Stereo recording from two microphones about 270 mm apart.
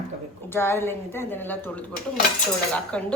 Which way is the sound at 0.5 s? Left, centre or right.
Centre.